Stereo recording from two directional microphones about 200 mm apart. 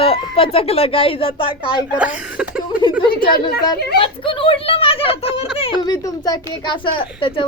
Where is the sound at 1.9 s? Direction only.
5° right (ahead or behind).